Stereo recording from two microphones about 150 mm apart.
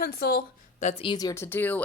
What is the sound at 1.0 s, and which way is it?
Speech, 25° left (ahead or behind).